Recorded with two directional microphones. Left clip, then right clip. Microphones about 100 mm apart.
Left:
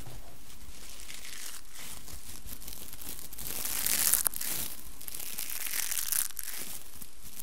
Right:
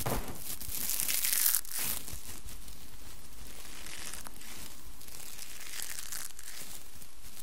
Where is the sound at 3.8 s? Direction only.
35° left (ahead or behind).